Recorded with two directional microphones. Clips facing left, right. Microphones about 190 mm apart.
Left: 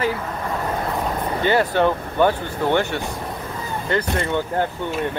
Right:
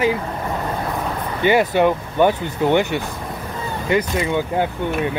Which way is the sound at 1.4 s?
15° right (ahead or behind).